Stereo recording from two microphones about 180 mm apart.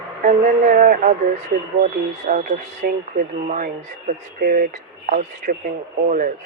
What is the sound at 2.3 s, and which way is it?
Speech, 45° right (ahead or behind).